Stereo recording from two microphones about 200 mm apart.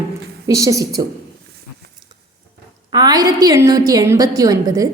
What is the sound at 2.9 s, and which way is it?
A woman's voice, 20° right (ahead or behind).